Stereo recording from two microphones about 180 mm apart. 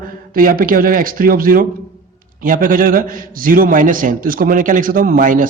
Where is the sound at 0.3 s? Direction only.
50° right (ahead or behind).